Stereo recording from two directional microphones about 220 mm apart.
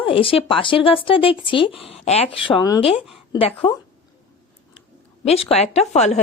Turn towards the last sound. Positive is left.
turn(degrees=30)  # may be behind; listen again after turning